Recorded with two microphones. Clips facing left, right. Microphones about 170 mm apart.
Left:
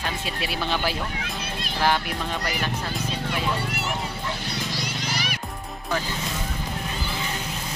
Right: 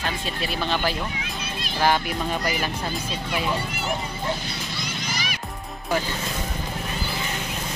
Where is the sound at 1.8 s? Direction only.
Centre (ahead or behind).